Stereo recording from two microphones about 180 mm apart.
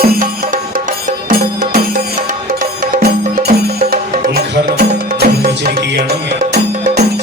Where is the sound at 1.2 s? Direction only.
50° right (ahead or behind).